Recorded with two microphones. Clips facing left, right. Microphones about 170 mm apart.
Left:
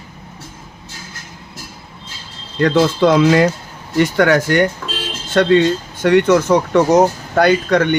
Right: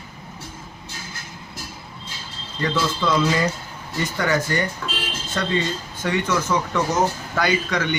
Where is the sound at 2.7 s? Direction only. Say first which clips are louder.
Left 9 dB; 60° left (ahead or behind).